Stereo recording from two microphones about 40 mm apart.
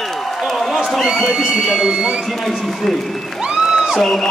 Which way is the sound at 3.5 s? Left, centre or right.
Centre.